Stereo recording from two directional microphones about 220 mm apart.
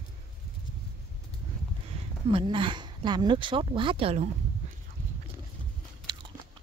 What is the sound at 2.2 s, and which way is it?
Speech, 20° right (ahead or behind).